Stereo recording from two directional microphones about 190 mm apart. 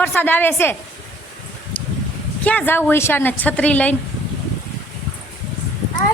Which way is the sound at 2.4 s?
10° left (ahead or behind).